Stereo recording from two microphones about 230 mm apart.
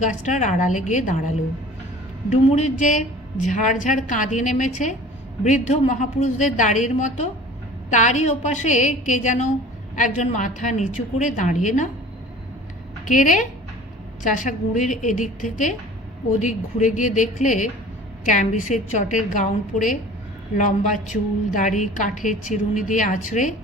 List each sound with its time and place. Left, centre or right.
0.0 s a woman's voice: left
2.3 s a woman's voice: left
13.1 s a woman's voice: left